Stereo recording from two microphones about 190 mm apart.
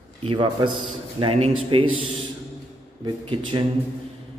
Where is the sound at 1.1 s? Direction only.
30° right (ahead or behind).